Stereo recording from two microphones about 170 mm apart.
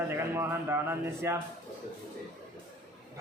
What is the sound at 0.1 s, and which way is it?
A man's voice, 15° right (ahead or behind).